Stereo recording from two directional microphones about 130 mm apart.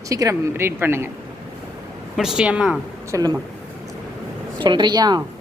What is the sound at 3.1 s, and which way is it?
Speech, 30° right (ahead or behind).